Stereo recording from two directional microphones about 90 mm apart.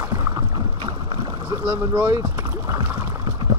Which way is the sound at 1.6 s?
30° right (ahead or behind).